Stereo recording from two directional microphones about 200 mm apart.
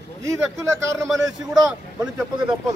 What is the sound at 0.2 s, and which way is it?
Speech, 15° right (ahead or behind).